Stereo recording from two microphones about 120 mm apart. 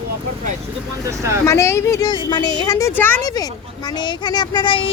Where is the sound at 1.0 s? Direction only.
25° right (ahead or behind).